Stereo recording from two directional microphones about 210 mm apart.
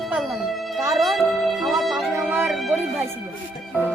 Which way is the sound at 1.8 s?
Centre (ahead or behind).